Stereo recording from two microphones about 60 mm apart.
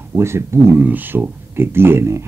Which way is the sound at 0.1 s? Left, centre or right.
Right.